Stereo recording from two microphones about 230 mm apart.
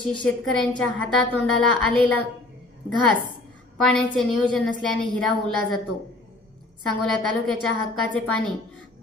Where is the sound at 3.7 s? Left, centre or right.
Centre.